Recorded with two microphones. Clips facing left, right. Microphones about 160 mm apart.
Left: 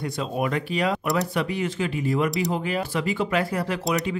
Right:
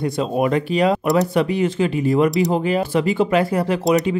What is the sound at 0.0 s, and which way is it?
Speech, 25° right (ahead or behind).